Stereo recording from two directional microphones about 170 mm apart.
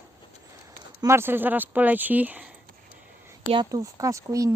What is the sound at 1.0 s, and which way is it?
Speech, 15° right (ahead or behind).